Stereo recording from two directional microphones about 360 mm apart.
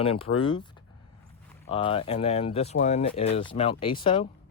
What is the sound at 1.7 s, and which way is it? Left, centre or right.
Speech, centre.